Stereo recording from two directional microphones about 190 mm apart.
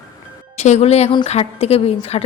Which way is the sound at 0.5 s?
35° left (ahead or behind).